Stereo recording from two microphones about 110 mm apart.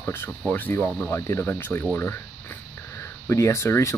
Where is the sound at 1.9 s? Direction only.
15° left (ahead or behind).